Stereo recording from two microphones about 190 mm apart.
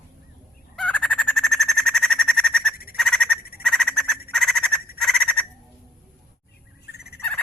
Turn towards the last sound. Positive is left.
turn(degrees=55)  # may be behind; listen again after turning